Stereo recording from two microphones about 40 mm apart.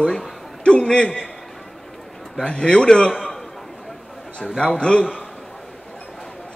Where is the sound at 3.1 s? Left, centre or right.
Centre.